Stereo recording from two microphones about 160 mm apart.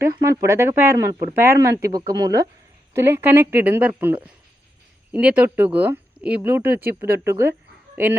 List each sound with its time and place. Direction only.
0.0 s speech: 15° right (ahead or behind)